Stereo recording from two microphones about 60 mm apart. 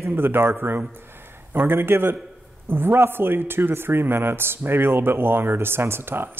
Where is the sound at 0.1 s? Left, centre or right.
Right.